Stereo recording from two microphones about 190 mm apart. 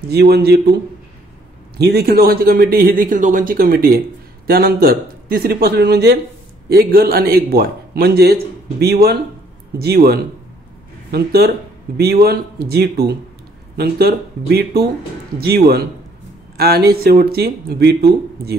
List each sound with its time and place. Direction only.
0.1 s a man's voice: 60° right (ahead or behind)
1.8 s a man's voice: 55° right (ahead or behind)